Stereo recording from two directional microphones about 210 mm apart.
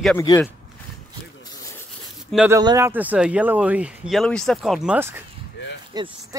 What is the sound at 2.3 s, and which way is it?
Speech, 5° right (ahead or behind).